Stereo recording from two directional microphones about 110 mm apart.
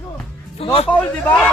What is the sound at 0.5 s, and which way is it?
Music, 65° left (ahead or behind).